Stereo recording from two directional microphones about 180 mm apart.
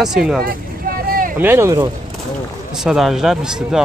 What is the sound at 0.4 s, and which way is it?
Vehicle, 55° right (ahead or behind).